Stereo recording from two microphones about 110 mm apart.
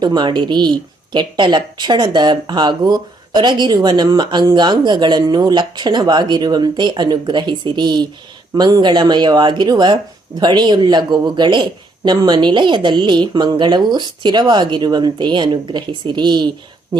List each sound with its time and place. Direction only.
0.0 s speech: 40° right (ahead or behind)